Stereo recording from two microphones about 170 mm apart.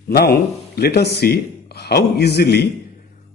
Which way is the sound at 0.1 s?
65° left (ahead or behind).